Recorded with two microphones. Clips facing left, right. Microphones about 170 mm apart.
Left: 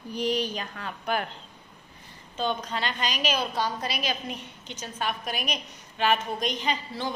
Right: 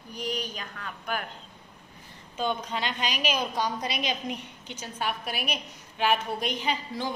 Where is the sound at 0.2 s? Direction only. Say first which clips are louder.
Left 6 dB; 40° left (ahead or behind).